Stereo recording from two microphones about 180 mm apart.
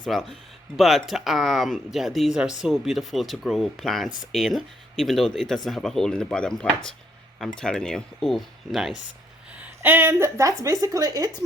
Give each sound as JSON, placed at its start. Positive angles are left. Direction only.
{"t": 0.0, "sound": "speech", "side_deg": 0}